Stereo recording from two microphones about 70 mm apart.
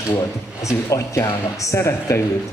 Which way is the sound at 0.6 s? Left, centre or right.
Left.